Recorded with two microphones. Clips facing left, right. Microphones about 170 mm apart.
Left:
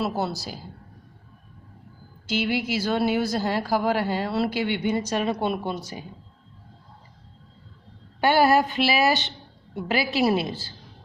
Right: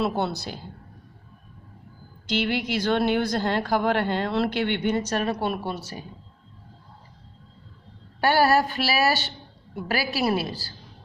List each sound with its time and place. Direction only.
0.0 s speech: centre (ahead or behind)
2.2 s speech: 10° left (ahead or behind)
8.2 s a woman's voice: 20° left (ahead or behind)